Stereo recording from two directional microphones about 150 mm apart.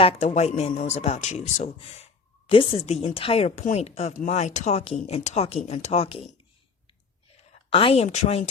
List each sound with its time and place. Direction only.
0.0 s speech: 45° left (ahead or behind)
7.7 s speech: 35° left (ahead or behind)